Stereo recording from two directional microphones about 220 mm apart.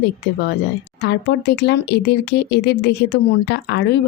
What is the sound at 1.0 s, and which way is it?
Speech, 50° left (ahead or behind).